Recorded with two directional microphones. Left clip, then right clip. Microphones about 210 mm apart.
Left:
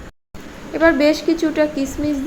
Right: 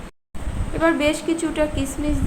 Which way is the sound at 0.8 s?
25° left (ahead or behind).